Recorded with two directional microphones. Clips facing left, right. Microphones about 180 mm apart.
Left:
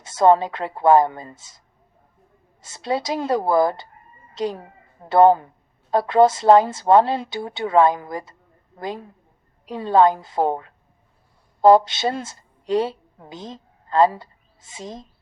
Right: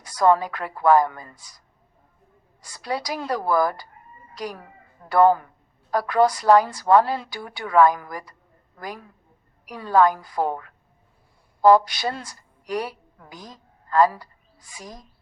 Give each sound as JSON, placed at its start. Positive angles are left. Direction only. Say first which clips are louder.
{"t": 0.0, "sound": "a woman's voice", "louder": "left 3 dB", "side_deg": 25}